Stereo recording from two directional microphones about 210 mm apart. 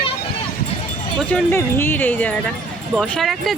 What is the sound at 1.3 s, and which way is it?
Speech, 10° left (ahead or behind).